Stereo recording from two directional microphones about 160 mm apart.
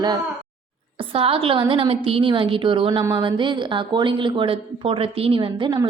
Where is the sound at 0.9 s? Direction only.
35° right (ahead or behind).